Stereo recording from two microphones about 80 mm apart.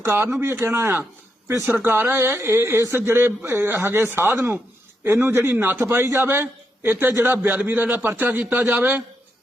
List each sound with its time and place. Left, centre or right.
0.0 s speech: right